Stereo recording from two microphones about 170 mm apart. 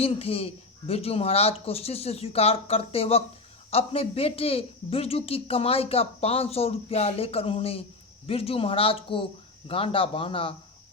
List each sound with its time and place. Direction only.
0.0 s speech: 35° left (ahead or behind)